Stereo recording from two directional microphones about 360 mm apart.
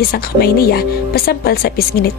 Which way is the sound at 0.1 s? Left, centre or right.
Left.